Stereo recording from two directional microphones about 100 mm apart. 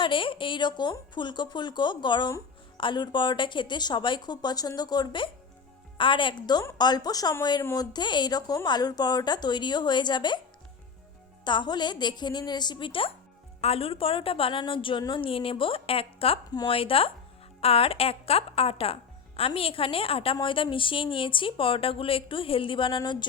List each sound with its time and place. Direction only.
0.0 s a woman's voice: 55° left (ahead or behind)
11.4 s a woman's voice: 50° left (ahead or behind)
13.6 s a woman's voice: 80° left
17.6 s a woman's voice: 80° left; by 23.0 s 55° left (ahead or behind)